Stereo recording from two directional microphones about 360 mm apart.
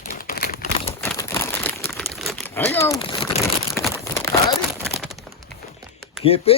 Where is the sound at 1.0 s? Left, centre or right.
Centre.